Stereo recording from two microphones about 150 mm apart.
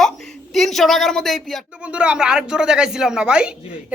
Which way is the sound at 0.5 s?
Centre (ahead or behind).